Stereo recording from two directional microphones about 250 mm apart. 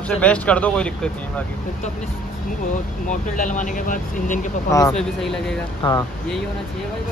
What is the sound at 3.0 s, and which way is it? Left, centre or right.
Speech, left.